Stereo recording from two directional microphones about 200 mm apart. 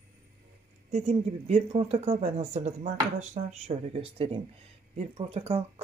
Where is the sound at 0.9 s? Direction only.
35° right (ahead or behind).